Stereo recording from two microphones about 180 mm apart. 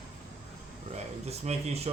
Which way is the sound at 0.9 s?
35° right (ahead or behind).